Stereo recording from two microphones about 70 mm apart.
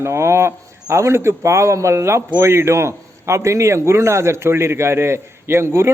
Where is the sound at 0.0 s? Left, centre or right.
Right.